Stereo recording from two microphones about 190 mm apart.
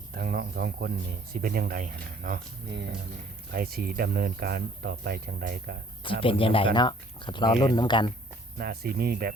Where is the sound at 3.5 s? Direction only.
55° right (ahead or behind).